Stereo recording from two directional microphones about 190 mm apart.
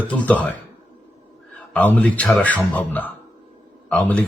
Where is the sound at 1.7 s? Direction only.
5° left (ahead or behind).